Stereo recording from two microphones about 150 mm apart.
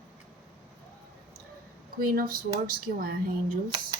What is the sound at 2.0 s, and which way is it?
Speech, 75° right (ahead or behind).